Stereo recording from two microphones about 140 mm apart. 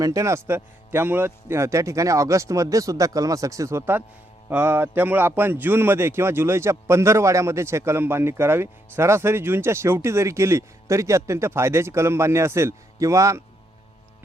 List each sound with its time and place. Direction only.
0.0 s a man's voice: 20° right (ahead or behind)